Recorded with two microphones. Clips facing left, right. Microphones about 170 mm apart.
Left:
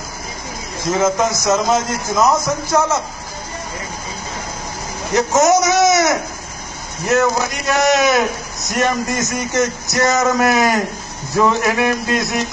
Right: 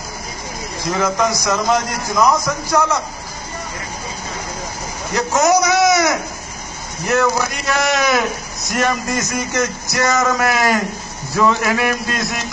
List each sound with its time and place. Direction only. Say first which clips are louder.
0.9 s speech: left 2 dB; 20° left (ahead or behind)
5.1 s speech: left 2 dB; 20° left (ahead or behind)
7.2 s speech: even; 20° left (ahead or behind)